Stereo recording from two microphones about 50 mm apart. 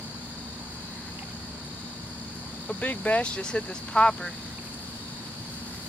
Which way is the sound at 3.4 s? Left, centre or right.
Centre.